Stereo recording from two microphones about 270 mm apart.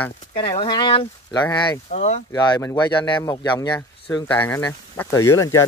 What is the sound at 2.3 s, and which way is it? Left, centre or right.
Speech, centre.